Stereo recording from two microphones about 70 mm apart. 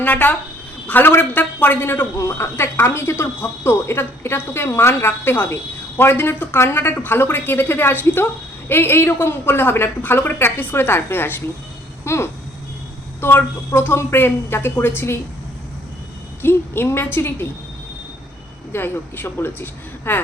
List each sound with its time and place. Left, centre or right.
0.0 s a man's voice: left
2.1 s speech: left
16.4 s speech: left
18.7 s speech: left